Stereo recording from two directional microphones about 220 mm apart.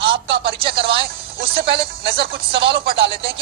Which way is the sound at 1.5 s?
45° right (ahead or behind).